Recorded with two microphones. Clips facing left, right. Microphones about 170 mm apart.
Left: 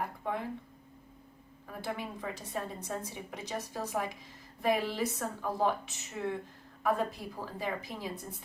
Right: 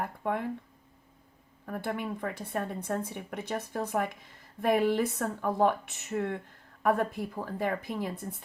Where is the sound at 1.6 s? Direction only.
55° right (ahead or behind).